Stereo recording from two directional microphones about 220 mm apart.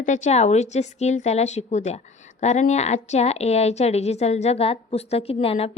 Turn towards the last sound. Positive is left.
turn(degrees=25)  # may be behind; listen again after turning